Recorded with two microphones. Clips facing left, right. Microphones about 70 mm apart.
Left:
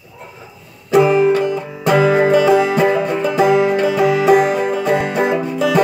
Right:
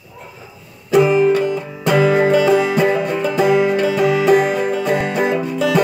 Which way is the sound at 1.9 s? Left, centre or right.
Centre.